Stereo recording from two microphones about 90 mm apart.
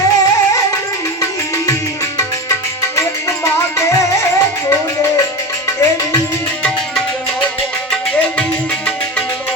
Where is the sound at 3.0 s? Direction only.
35° left (ahead or behind).